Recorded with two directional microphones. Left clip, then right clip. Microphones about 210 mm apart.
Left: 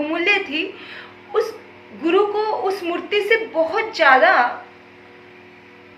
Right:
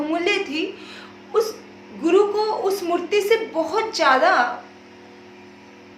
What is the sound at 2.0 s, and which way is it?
A woman's voice, 30° right (ahead or behind).